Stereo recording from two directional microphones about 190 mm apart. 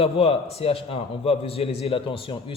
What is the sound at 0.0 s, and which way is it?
Speech, 30° left (ahead or behind).